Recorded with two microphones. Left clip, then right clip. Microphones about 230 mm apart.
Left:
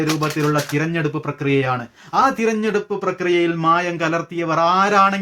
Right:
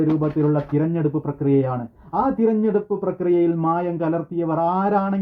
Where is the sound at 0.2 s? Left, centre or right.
Left.